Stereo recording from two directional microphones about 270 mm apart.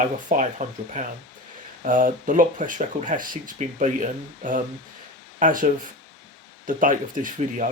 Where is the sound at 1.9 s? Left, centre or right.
Right.